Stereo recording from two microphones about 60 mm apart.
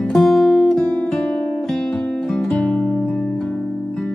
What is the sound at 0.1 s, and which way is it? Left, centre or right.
Music, centre.